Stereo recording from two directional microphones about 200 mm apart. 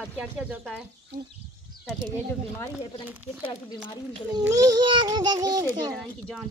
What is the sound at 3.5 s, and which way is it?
Speech, 20° left (ahead or behind).